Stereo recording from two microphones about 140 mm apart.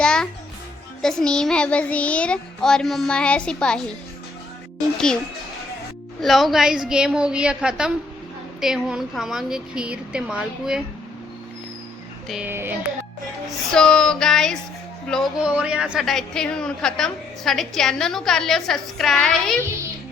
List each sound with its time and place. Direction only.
0.0 s music: 5° left (ahead or behind)
1.0 s child singing: 5° left (ahead or behind)
6.2 s a woman's voice: centre (ahead or behind)
12.5 s music: 15° right (ahead or behind)
13.7 s a woman's voice: 5° left (ahead or behind)
15.4 s a woman's voice: 5° right (ahead or behind)